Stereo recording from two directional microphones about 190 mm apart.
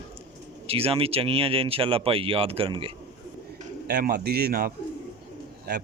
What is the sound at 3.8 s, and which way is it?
Speech, 55° right (ahead or behind).